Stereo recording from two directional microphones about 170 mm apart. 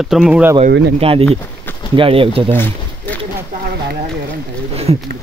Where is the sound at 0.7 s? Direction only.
90° right.